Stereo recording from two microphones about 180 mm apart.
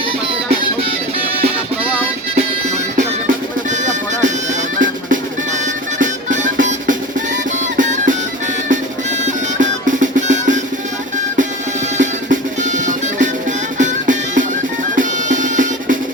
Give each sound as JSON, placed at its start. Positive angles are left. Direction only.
{"t": 3.2, "sound": "music", "side_deg": -45}
{"t": 9.2, "sound": "music", "side_deg": -45}
{"t": 11.9, "sound": "music", "side_deg": -45}